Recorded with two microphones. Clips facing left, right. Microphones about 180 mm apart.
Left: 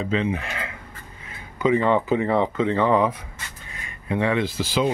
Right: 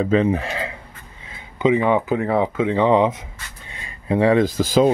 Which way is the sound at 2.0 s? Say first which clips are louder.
Right 1 dB; centre (ahead or behind).